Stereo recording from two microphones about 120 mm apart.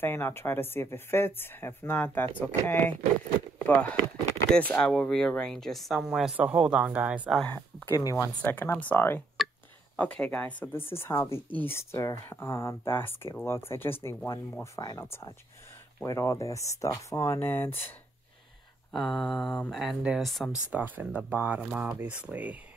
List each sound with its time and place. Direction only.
0.0 s speech: 20° left (ahead or behind)
3.5 s walk: 15° left (ahead or behind)
4.5 s speech: 10° left (ahead or behind); by 7.2 s 10° right (ahead or behind)
7.4 s speech: 15° left (ahead or behind)
7.9 s speech: 30° left (ahead or behind)
8.5 s speech: 15° left (ahead or behind); by 15.0 s 30° left (ahead or behind)
16.1 s speech: 25° left (ahead or behind)
18.9 s speech: 5° left (ahead or behind)
19.8 s speech: 5° right (ahead or behind)
20.5 s speech: 15° right (ahead or behind)